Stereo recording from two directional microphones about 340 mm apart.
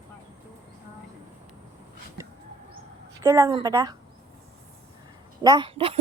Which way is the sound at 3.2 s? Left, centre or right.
Centre.